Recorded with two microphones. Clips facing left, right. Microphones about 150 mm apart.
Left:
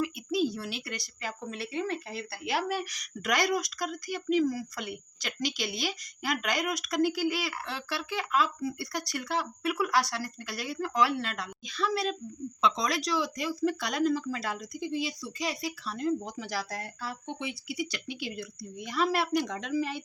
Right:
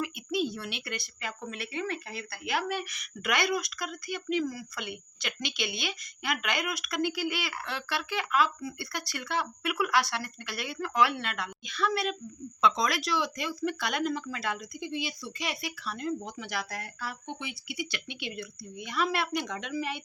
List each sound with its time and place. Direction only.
0.0 s speech: 35° left (ahead or behind)